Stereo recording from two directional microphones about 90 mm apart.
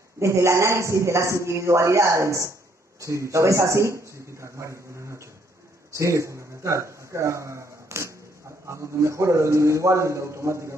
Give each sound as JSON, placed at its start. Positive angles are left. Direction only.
{"t": 0.2, "sound": "a man's voice", "side_deg": -30}
{"t": 5.9, "sound": "a man's voice", "side_deg": -35}